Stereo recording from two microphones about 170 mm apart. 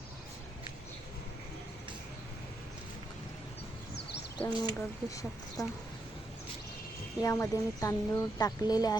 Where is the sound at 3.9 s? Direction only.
80° left.